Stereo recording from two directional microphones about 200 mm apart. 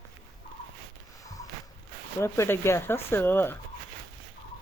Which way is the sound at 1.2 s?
15° left (ahead or behind).